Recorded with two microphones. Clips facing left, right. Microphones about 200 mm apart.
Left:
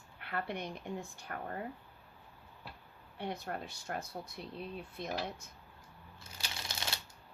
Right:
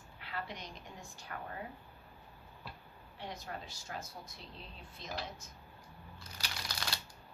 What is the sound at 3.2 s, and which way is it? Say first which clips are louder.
Speech: left 5 dB; 60° left (ahead or behind).